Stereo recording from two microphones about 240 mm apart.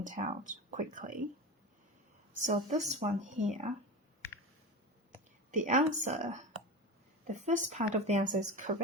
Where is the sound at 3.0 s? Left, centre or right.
Right.